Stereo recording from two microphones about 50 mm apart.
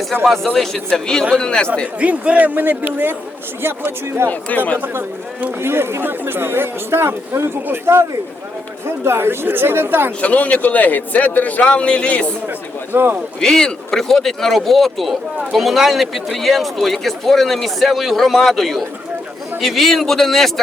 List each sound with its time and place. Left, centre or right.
0.5 s a man's voice: centre
2.0 s speech: right
4.3 s speech: left
5.5 s speech: right
9.0 s speech: right
10.2 s a man's voice: left
12.9 s speech: right
13.4 s speech: centre